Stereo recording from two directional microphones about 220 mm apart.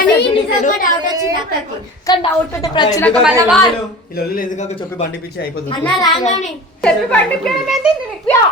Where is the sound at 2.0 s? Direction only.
15° left (ahead or behind).